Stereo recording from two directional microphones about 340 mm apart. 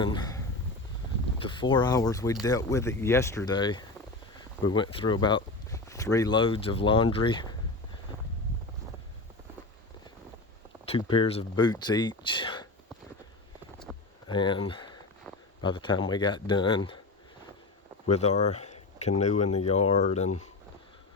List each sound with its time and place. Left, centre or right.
0.0 s a sound: centre
1.4 s speech: centre
10.8 s speech: centre
13.9 s a sound: centre
14.3 s speech: centre
18.1 s speech: centre